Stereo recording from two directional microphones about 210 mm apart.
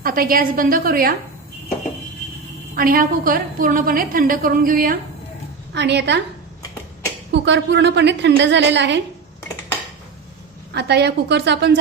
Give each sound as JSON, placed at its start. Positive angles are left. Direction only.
{"t": 0.0, "sound": "a woman's voice", "side_deg": -45}
{"t": 2.7, "sound": "a woman's voice", "side_deg": -40}
{"t": 5.7, "sound": "a woman's voice", "side_deg": -55}
{"t": 7.3, "sound": "a woman's voice", "side_deg": -55}
{"t": 10.8, "sound": "a woman's voice", "side_deg": -55}